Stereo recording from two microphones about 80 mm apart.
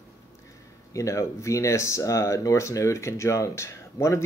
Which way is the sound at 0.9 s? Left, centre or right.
Left.